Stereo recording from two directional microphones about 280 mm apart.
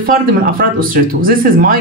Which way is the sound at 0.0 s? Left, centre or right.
Right.